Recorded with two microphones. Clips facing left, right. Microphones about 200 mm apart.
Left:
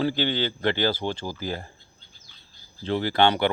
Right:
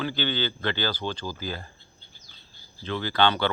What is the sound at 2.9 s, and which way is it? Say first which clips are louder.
Speech: left 3 dB; 25° left (ahead or behind).